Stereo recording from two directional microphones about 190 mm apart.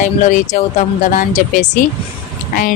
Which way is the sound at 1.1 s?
40° left (ahead or behind).